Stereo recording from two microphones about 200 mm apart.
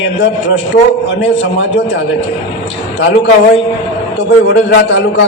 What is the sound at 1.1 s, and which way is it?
Speech, 60° left (ahead or behind).